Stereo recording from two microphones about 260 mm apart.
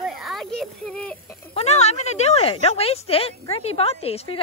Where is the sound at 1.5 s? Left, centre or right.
Left.